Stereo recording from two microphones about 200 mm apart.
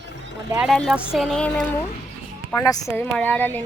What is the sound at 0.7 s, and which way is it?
Speech, centre (ahead or behind).